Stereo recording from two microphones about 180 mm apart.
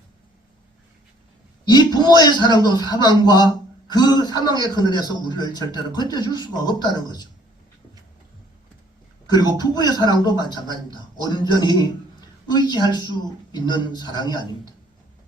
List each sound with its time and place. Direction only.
1.6 s a man's voice: 25° left (ahead or behind)
9.3 s a man's voice: 20° left (ahead or behind)